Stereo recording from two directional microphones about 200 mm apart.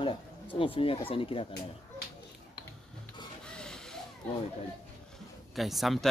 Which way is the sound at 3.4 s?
5° left (ahead or behind).